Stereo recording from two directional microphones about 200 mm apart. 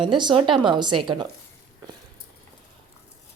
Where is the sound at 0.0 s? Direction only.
25° right (ahead or behind).